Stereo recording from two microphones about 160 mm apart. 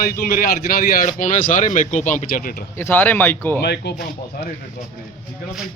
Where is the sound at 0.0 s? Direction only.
65° left (ahead or behind).